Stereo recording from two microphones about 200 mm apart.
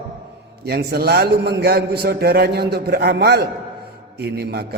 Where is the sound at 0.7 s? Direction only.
55° right (ahead or behind).